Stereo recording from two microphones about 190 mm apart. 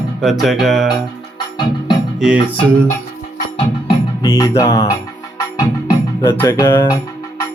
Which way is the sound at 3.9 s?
20° left (ahead or behind).